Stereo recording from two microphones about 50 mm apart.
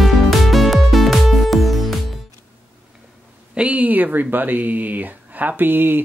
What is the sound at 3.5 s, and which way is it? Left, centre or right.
Speech, right.